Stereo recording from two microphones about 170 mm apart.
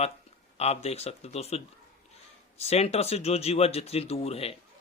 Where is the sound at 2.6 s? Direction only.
35° left (ahead or behind).